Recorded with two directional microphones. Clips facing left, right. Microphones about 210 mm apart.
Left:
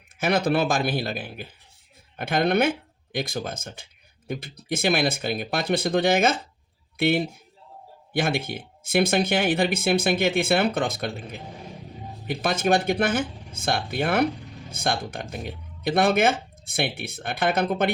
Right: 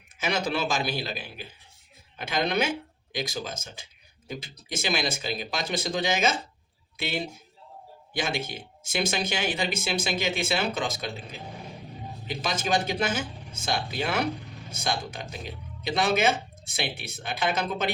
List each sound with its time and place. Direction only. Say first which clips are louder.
0.2 s speech: left 6 dB; 55° left (ahead or behind)